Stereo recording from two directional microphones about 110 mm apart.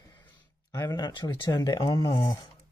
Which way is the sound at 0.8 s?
40° left (ahead or behind).